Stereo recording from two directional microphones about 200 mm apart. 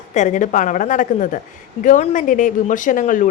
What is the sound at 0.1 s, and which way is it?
A woman's voice, 35° left (ahead or behind).